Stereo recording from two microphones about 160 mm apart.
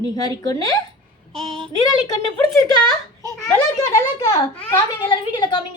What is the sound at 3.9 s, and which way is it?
Speech, 25° left (ahead or behind).